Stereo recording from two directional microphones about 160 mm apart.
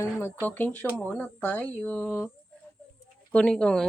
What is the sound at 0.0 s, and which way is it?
Speech, 15° left (ahead or behind).